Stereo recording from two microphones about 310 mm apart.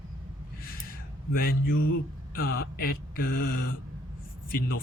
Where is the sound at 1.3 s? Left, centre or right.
Left.